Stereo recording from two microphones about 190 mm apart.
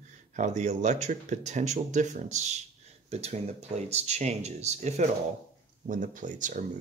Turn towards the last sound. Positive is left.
turn(degrees=-45)  # may be behind; listen again after turning